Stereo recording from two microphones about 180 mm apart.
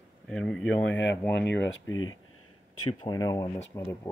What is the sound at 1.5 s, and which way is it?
Speech, 90° left.